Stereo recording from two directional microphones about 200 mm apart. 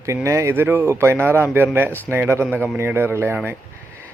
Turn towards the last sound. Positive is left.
turn(degrees=-10)  # may be behind; listen again after turning